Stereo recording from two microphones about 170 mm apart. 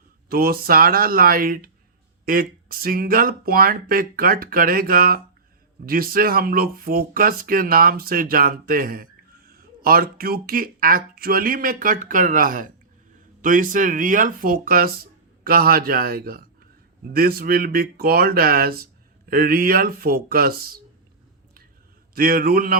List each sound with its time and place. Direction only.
0.3 s speech: 60° right (ahead or behind)
22.1 s speech: 60° right (ahead or behind)